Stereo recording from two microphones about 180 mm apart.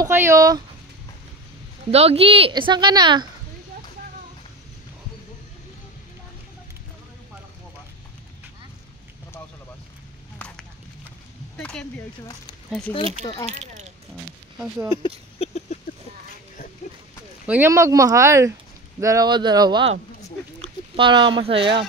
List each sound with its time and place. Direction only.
0.0 s a woman's voice: 15° right (ahead or behind)
1.9 s a woman's voice: 35° right (ahead or behind)
10.4 s a sound: 5° left (ahead or behind)
11.5 s speech: 5° left (ahead or behind)
12.9 s speech: 30° left (ahead or behind)
13.5 s speech: 40° right (ahead or behind)
15.0 s a sound: 35° left (ahead or behind)
17.5 s a woman's voice: 10° right (ahead or behind); by 21.8 s 30° right (ahead or behind)